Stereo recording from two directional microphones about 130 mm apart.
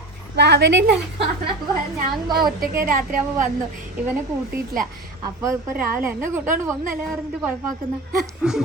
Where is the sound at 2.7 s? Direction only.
90° right.